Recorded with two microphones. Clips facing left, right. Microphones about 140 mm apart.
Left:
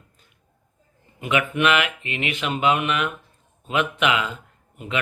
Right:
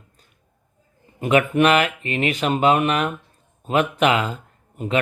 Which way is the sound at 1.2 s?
40° right (ahead or behind).